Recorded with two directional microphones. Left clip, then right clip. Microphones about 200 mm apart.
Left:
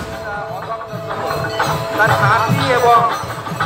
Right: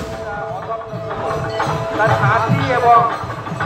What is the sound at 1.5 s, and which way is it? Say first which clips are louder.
Music: left 3 dB; 50° left (ahead or behind).